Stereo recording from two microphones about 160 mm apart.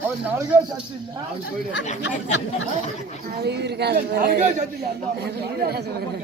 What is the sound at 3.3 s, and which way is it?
Speech, 90° right.